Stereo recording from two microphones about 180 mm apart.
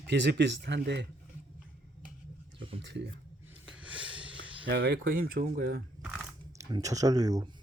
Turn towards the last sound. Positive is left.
turn(degrees=-20)  # may be behind; listen again after turning